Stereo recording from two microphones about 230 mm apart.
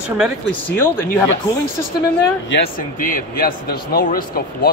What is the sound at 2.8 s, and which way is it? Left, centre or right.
Speech, left.